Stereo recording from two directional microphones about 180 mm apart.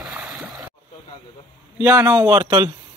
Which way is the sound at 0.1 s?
Centre (ahead or behind).